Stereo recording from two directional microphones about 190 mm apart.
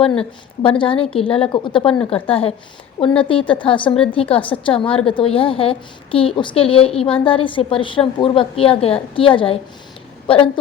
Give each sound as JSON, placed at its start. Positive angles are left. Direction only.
{"t": 0.6, "sound": "a woman's voice", "side_deg": 30}